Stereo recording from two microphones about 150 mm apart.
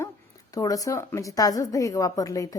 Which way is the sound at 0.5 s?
25° left (ahead or behind).